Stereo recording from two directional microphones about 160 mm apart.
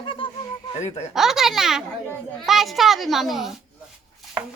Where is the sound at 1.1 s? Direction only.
Centre (ahead or behind).